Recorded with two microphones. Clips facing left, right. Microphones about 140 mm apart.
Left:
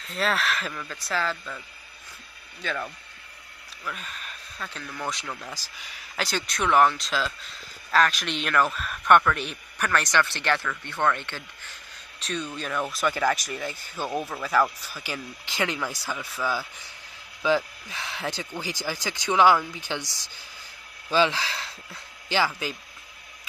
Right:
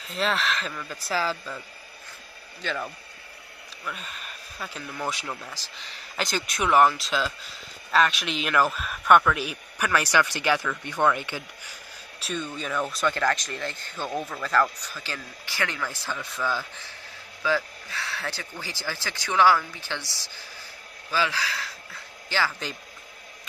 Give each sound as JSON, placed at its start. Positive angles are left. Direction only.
{"t": 0.0, "sound": "speech", "side_deg": 0}
{"t": 2.6, "sound": "speech", "side_deg": 0}
{"t": 5.5, "sound": "speech", "side_deg": 10}
{"t": 6.1, "sound": "speech", "side_deg": 0}
{"t": 22.6, "sound": "speech", "side_deg": 5}